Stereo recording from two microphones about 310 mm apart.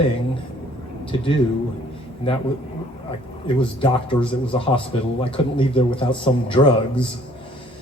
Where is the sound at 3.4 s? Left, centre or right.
Centre.